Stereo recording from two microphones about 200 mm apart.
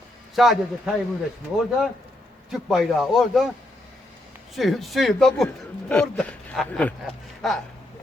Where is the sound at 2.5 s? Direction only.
Centre (ahead or behind).